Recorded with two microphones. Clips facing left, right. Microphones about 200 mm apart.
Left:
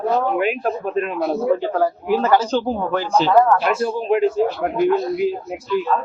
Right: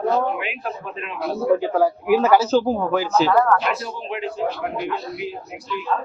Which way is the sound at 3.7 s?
50° left (ahead or behind).